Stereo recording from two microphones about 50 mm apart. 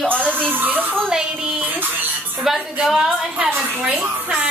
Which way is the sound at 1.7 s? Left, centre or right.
Right.